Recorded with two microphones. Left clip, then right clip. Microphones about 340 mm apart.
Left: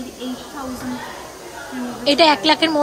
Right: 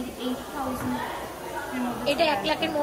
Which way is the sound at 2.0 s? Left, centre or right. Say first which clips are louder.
Left 10 dB; centre.